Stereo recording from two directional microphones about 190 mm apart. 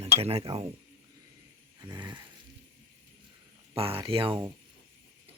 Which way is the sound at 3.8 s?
30° right (ahead or behind).